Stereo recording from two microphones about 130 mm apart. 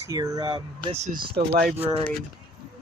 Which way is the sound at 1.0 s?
70° right (ahead or behind).